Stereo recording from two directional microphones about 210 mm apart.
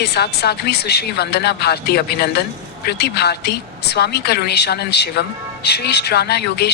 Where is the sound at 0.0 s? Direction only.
50° left (ahead or behind).